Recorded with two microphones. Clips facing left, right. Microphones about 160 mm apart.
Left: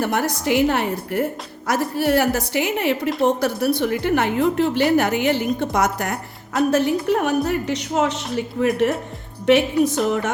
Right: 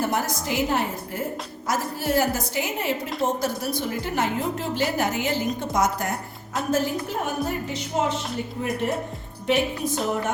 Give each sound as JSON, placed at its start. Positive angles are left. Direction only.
{"t": 0.0, "sound": "a woman's voice", "side_deg": 65}